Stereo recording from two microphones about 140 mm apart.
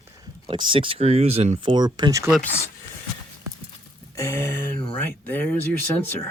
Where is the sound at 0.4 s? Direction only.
35° right (ahead or behind).